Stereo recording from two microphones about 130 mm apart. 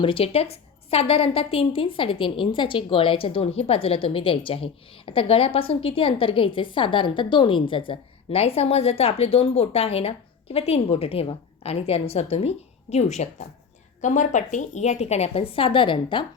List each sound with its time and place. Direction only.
0.0 s a woman's voice: 45° left (ahead or behind)
14.0 s speech: 75° left (ahead or behind); by 16.2 s 40° left (ahead or behind)